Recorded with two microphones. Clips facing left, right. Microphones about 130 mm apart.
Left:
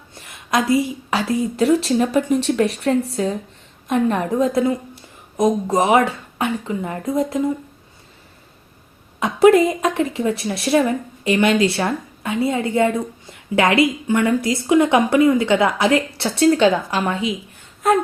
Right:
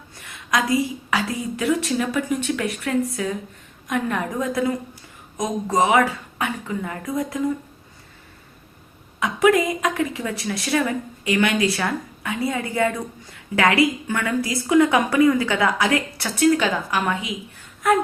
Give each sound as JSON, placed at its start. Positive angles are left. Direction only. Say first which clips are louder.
{"t": 0.1, "sound": "a sound", "louder": "left 3 dB", "side_deg": 25}
{"t": 1.5, "sound": "a woman's voice", "louder": "left 5 dB", "side_deg": 35}
{"t": 9.2, "sound": "a woman's voice", "louder": "left 5 dB", "side_deg": 30}